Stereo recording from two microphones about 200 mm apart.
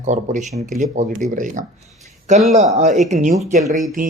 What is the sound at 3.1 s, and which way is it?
Speech, 40° right (ahead or behind).